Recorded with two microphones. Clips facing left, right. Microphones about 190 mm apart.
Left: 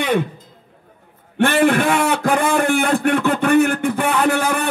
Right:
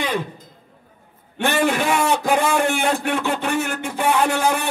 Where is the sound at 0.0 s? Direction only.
55° left (ahead or behind).